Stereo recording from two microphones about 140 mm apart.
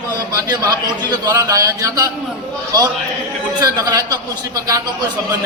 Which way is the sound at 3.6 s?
25° right (ahead or behind).